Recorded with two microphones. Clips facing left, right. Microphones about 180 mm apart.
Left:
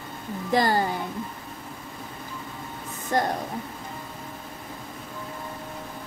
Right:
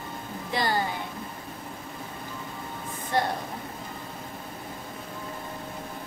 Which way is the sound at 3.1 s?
45° left (ahead or behind).